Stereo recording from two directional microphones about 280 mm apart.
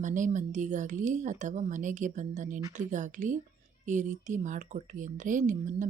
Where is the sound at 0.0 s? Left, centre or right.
Right.